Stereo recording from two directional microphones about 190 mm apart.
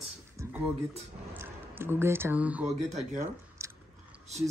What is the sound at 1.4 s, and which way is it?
Speech, 10° right (ahead or behind).